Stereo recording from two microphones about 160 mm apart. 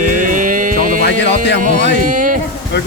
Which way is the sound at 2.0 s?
55° right (ahead or behind).